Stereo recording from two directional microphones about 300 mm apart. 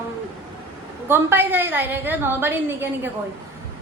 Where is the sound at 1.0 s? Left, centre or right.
Centre.